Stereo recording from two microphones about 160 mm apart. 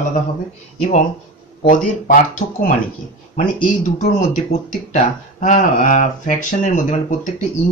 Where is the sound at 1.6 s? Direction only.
55° left (ahead or behind).